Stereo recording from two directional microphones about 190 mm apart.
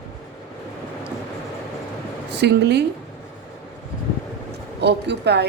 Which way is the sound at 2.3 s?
60° right (ahead or behind).